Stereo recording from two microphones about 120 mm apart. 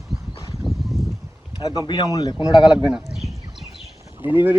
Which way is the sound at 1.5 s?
35° left (ahead or behind).